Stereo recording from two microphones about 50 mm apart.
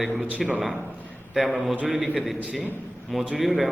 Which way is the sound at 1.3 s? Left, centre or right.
Centre.